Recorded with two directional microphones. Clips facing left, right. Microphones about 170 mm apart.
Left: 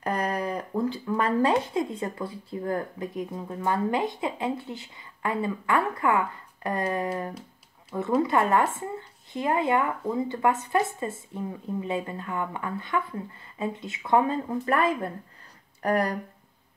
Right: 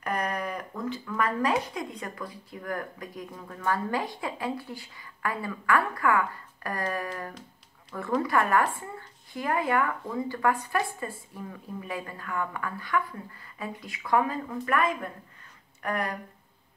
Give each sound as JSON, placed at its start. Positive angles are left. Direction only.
{"t": 0.0, "sound": "speech", "side_deg": 30}